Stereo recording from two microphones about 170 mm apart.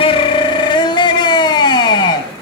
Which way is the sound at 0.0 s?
30° left (ahead or behind).